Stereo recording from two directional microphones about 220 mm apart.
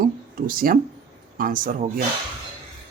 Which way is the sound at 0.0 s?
40° right (ahead or behind).